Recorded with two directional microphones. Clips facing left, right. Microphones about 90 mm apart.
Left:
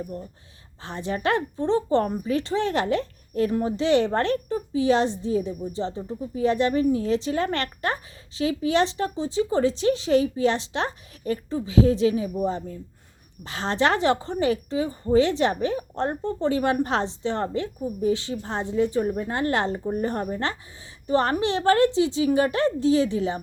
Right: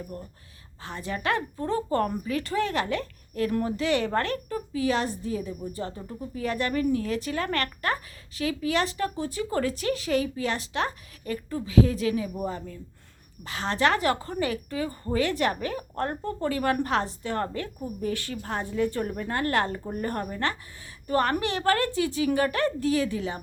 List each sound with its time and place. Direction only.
0.9 s a woman's voice: 30° left (ahead or behind)